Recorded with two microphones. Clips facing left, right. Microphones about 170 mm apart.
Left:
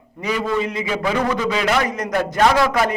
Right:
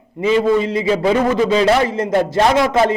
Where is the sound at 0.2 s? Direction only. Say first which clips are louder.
Right 7 dB; 25° right (ahead or behind).